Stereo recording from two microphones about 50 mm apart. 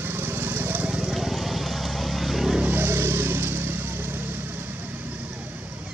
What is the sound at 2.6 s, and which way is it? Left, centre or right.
Vehicle, right.